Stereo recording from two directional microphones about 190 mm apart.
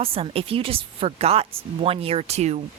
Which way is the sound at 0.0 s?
30° right (ahead or behind).